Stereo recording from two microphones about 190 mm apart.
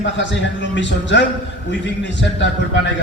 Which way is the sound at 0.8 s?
70° left (ahead or behind).